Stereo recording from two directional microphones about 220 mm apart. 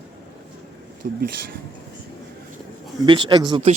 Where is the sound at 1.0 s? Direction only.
35° right (ahead or behind).